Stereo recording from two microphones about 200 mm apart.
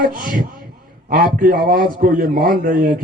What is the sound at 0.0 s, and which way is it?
A man's voice, 45° right (ahead or behind).